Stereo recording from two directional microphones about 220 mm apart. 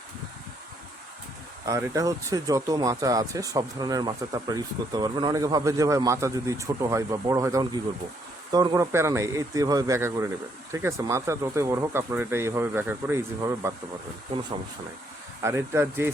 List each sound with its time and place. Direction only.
1.6 s speech: 15° right (ahead or behind)
15.4 s speech: 10° right (ahead or behind)